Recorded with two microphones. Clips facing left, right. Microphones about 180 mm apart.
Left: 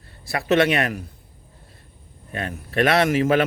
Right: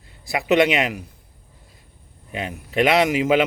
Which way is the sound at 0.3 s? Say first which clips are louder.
Right 1 dB; 15° right (ahead or behind).